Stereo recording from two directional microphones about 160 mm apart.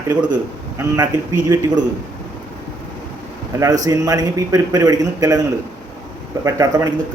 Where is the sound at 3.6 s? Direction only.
20° right (ahead or behind).